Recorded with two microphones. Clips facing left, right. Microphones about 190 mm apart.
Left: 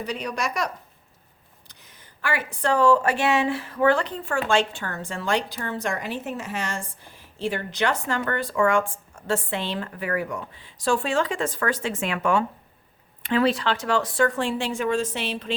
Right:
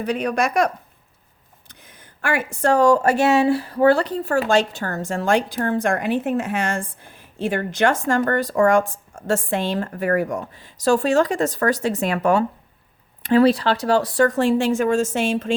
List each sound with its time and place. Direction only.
0.0 s speech: 55° right (ahead or behind)